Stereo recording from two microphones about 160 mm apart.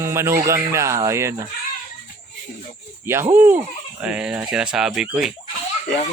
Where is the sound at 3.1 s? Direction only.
15° right (ahead or behind).